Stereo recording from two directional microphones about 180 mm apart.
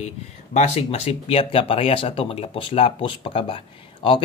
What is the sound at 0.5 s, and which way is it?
Speech, 35° left (ahead or behind).